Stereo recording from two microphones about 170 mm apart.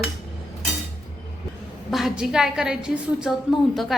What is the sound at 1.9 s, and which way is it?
A woman's voice, centre (ahead or behind).